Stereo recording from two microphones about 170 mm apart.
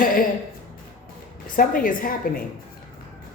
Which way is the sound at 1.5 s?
55° left (ahead or behind).